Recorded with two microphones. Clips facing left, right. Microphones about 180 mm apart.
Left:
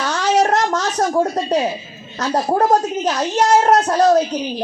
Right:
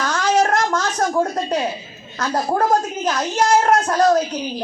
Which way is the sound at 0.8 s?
20° left (ahead or behind).